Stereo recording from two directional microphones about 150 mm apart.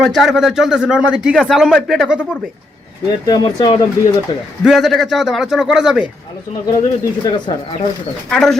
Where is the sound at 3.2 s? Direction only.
25° left (ahead or behind).